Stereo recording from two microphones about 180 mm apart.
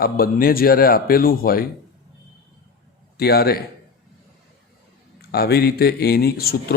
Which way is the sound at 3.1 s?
60° left (ahead or behind).